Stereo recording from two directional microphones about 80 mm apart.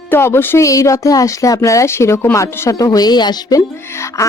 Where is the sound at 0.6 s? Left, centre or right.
Left.